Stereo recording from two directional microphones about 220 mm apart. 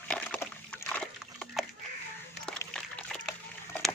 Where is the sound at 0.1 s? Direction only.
5° left (ahead or behind).